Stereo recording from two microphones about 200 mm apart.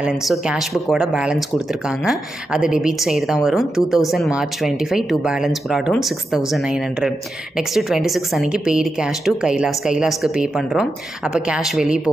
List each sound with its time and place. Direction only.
0.0 s speech: 5° right (ahead or behind)